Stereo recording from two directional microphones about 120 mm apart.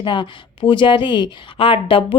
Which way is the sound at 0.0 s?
40° left (ahead or behind).